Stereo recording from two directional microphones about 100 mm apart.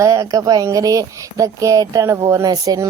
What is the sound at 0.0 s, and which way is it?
A woman's voice, 35° right (ahead or behind).